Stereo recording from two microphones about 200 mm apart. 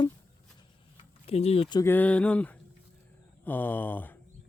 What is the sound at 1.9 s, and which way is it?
A man's voice, 5° left (ahead or behind).